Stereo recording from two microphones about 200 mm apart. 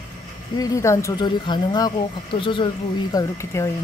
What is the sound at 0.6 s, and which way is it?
Speech, 15° left (ahead or behind).